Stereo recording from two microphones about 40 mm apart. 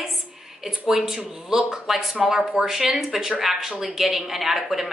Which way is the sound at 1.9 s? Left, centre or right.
Centre.